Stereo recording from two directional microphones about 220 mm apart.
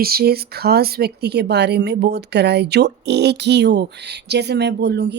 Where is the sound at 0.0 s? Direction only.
45° right (ahead or behind).